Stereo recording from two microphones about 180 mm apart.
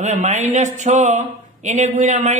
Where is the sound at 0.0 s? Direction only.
40° right (ahead or behind).